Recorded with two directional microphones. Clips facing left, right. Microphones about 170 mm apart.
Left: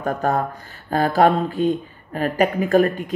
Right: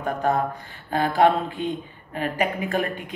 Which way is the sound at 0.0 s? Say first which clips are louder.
Left 2 dB; 45° left (ahead or behind).